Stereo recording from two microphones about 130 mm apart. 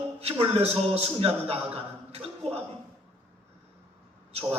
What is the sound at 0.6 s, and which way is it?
A man's voice, 55° right (ahead or behind).